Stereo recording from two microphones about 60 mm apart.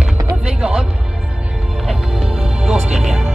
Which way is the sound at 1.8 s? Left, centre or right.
Centre.